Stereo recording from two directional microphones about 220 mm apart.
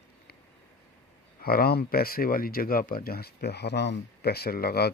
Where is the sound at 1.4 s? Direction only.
40° left (ahead or behind).